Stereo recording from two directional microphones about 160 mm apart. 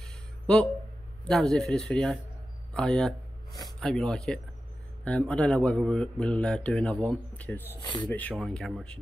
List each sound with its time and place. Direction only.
0.0 s a sound: 5° left (ahead or behind)
1.3 s speech: centre (ahead or behind)
7.8 s speech: 30° left (ahead or behind)
8.1 s speech: 10° left (ahead or behind)